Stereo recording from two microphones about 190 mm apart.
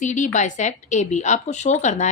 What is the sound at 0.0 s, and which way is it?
A woman's voice, 40° left (ahead or behind).